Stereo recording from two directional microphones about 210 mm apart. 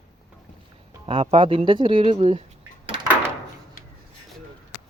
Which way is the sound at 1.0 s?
25° right (ahead or behind).